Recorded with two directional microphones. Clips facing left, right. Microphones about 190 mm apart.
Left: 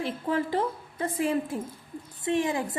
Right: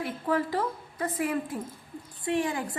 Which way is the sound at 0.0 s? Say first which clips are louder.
Even; 25° left (ahead or behind).